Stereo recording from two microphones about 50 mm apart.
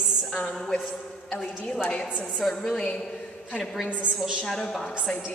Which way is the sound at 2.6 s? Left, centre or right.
Centre.